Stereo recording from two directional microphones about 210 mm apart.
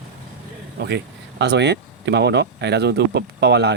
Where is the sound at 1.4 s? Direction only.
55° right (ahead or behind).